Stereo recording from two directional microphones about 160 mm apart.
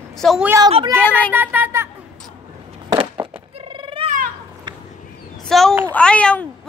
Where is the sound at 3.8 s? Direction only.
30° right (ahead or behind).